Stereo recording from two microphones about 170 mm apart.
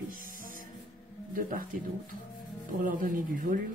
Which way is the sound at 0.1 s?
55° right (ahead or behind).